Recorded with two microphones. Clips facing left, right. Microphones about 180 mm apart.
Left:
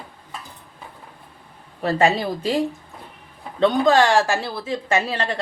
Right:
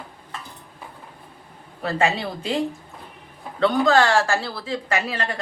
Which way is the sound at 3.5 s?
20° left (ahead or behind).